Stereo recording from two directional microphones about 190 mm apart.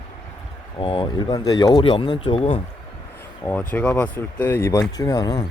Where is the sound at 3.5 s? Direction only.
5° left (ahead or behind).